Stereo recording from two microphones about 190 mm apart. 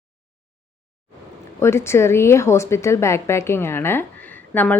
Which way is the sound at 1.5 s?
15° left (ahead or behind).